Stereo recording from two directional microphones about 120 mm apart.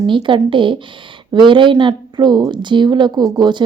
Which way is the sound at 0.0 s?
40° right (ahead or behind).